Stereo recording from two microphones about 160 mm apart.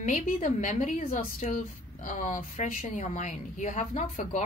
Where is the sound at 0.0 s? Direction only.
50° left (ahead or behind).